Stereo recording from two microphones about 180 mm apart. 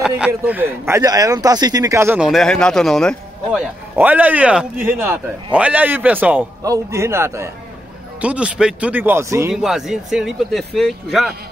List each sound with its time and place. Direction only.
0.3 s speech: 10° right (ahead or behind)
2.1 s speech: centre (ahead or behind)
9.5 s speech: centre (ahead or behind)